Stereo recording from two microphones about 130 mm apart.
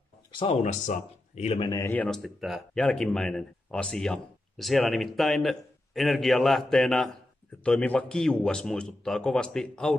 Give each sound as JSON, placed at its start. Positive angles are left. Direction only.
{"t": 0.3, "sound": "a sound", "side_deg": 45}
{"t": 0.6, "sound": "speech", "side_deg": 70}
{"t": 1.6, "sound": "speech", "side_deg": 25}
{"t": 1.9, "sound": "speech", "side_deg": 10}